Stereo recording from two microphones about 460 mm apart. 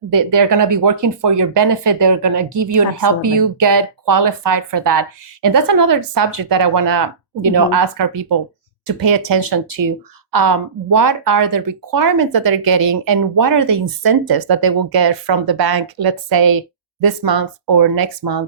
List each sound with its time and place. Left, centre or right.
0.1 s speech: right
1.2 s speech: right
1.9 s speech: right